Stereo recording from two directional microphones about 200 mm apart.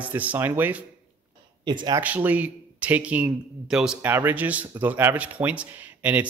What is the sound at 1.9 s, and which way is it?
Speech, 10° right (ahead or behind).